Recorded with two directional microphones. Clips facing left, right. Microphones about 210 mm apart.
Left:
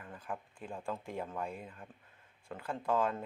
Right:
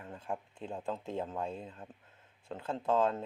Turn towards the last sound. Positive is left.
turn(degrees=-20)  # may be behind; listen again after turning